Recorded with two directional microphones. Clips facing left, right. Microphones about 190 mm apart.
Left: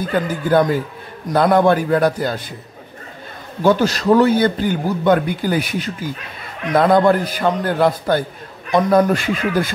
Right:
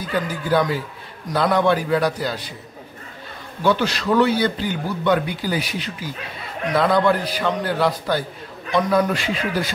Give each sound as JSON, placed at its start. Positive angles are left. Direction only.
{"t": 0.0, "sound": "a man's voice", "side_deg": 50}
{"t": 3.6, "sound": "a man's voice", "side_deg": 45}